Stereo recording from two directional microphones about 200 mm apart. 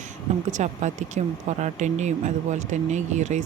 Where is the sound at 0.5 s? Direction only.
35° right (ahead or behind).